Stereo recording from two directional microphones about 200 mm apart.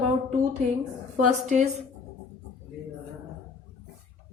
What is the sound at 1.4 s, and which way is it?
Speech, 35° right (ahead or behind).